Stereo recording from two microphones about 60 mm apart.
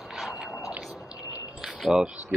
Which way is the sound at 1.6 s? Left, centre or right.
Centre.